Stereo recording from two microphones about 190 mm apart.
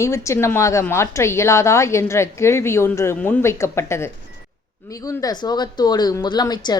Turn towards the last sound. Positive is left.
turn(degrees=20)  # may be behind; listen again after turning